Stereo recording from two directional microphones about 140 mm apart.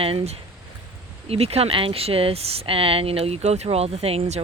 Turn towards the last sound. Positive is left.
turn(degrees=-50)  # may be behind; listen again after turning